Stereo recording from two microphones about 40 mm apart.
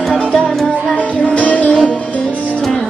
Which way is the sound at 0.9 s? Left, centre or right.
Left.